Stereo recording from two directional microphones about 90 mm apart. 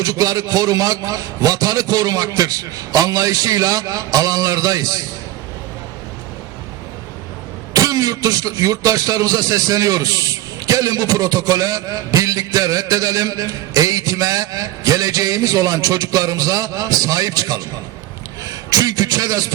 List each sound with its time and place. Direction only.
0.0 s speech: 40° right (ahead or behind)
7.7 s speech: 40° right (ahead or behind)